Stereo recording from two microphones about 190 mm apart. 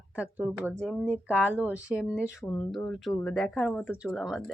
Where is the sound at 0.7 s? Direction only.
5° left (ahead or behind).